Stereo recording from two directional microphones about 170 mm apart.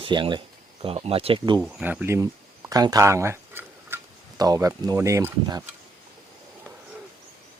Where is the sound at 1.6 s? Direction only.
10° right (ahead or behind).